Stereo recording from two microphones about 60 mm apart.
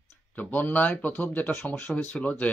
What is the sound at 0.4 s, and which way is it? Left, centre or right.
Speech, left.